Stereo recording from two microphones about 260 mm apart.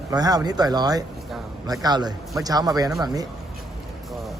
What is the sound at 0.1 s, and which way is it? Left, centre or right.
A man's voice, centre.